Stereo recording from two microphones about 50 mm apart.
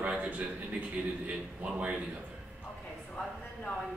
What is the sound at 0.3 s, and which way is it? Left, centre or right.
A man's voice, right.